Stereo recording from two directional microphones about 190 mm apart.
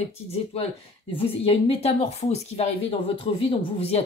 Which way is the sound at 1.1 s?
30° left (ahead or behind).